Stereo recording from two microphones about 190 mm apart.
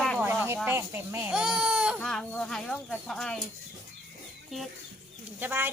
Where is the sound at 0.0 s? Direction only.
5° right (ahead or behind).